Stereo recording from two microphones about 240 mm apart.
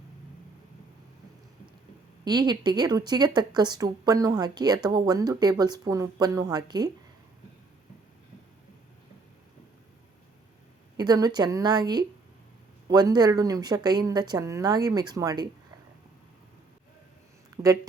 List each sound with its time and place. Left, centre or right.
2.2 s speech: centre
10.9 s speech: centre
17.6 s a woman's voice: centre